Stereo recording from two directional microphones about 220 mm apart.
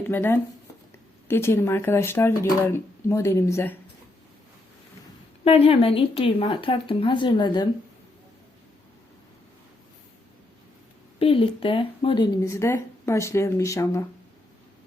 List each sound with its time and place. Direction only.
0.0 s speech: 10° left (ahead or behind)
5.5 s speech: 25° left (ahead or behind)
11.2 s speech: 25° left (ahead or behind)